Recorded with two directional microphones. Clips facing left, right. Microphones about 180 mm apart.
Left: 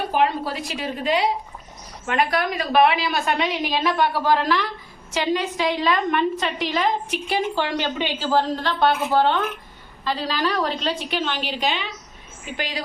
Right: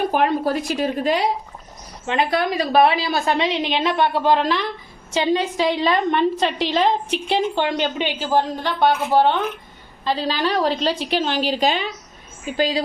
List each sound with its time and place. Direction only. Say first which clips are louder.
0.2 s a woman's voice: right 3 dB; 50° right (ahead or behind)
2.0 s a woman's voice: right 2 dB; 25° right (ahead or behind)
10.0 s a woman's voice: right 3 dB; 25° right (ahead or behind)
12.5 s a woman's voice: right 9 dB; 30° right (ahead or behind)